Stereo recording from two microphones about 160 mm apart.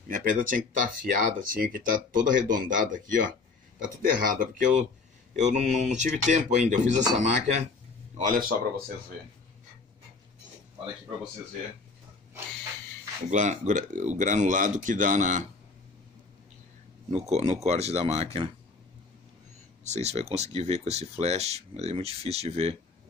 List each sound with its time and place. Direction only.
0.1 s speech: 55° right (ahead or behind)
8.2 s speech: 60° right (ahead or behind)
13.3 s speech: 50° right (ahead or behind)
17.1 s speech: 45° right (ahead or behind)
19.8 s speech: 45° right (ahead or behind)